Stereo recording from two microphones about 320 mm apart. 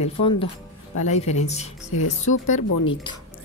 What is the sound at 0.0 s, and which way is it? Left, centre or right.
Speech, centre.